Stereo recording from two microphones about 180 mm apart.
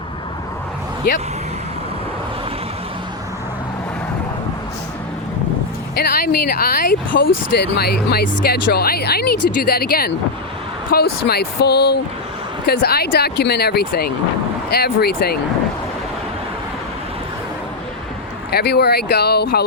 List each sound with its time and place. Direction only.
6.0 s speech: 55° left (ahead or behind)
18.5 s speech: 65° left (ahead or behind)